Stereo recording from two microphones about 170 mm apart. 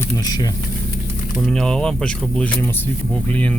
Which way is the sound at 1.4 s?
Centre (ahead or behind).